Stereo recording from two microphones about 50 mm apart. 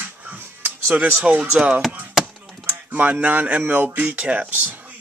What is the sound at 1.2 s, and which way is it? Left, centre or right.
Speech, right.